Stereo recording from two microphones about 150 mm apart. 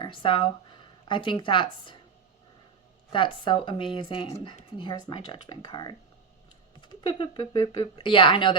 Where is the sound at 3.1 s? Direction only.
35° left (ahead or behind).